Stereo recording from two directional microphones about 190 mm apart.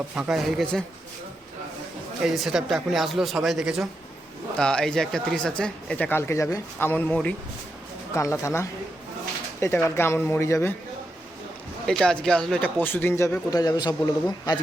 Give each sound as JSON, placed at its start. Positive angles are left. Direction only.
{"t": 0.2, "sound": "speech", "side_deg": 0}
{"t": 2.2, "sound": "speech", "side_deg": 0}
{"t": 11.9, "sound": "speech", "side_deg": 5}